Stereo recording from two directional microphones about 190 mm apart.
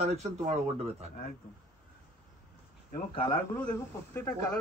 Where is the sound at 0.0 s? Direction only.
35° right (ahead or behind).